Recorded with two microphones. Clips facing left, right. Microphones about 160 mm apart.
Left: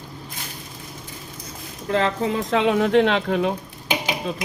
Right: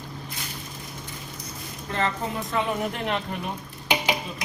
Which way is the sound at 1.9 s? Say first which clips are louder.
Left 6 dB; 90° left.